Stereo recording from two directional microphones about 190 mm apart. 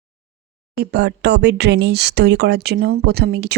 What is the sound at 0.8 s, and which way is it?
Speech, 60° right (ahead or behind).